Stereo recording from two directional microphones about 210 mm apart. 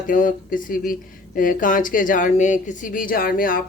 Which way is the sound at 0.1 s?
40° left (ahead or behind).